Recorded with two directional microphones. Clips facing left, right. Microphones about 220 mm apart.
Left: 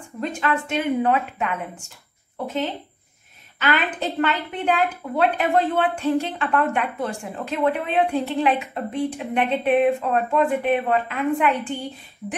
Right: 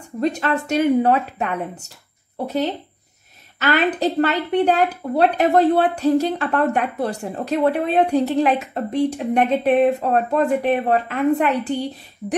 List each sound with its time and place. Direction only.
0.2 s a woman's voice: 40° right (ahead or behind)